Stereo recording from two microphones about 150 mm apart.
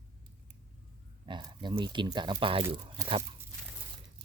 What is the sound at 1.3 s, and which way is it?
Speech, 30° right (ahead or behind).